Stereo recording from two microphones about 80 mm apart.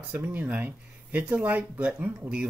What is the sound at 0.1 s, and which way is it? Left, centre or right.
Speech, centre.